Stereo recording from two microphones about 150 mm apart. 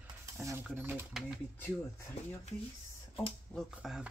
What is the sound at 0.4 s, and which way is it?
Speech, 20° right (ahead or behind).